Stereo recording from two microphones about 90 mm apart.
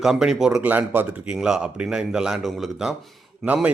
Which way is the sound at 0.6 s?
20° right (ahead or behind).